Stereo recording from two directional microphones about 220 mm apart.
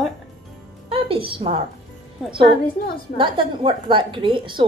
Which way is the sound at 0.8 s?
25° right (ahead or behind).